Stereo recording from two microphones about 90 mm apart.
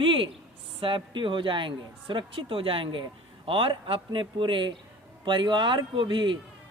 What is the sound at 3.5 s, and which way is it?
Speech, 90° right.